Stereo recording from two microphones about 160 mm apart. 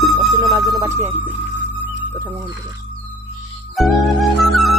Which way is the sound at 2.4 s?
25° right (ahead or behind).